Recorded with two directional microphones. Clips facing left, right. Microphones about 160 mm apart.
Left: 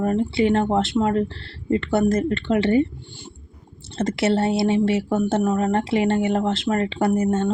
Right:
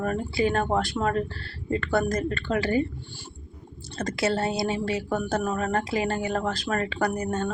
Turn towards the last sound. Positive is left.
turn(degrees=25)  # may be behind; listen again after turning